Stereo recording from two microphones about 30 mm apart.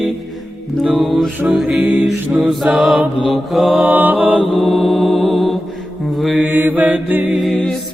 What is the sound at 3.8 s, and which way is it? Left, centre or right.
Mantra, right.